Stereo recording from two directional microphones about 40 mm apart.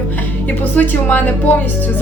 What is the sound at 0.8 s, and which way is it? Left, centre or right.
Speech, left.